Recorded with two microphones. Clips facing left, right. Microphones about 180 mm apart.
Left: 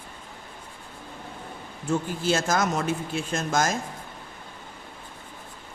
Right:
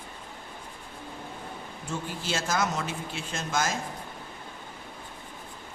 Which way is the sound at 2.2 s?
50° left (ahead or behind).